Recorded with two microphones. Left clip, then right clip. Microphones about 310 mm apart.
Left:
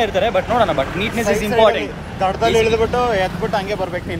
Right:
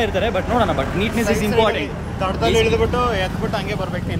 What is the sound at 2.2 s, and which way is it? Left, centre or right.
Speech, centre.